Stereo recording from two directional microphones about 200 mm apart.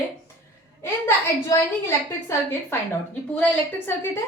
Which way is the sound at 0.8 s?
10° left (ahead or behind).